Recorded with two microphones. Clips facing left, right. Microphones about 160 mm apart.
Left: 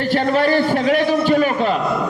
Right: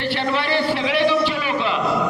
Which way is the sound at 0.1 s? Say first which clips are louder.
Left 7 dB; 45° left (ahead or behind).